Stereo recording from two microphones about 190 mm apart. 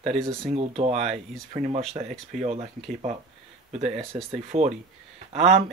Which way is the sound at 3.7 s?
35° right (ahead or behind).